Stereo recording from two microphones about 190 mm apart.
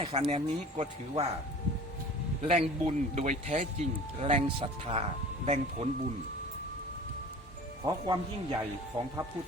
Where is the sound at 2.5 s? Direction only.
35° right (ahead or behind).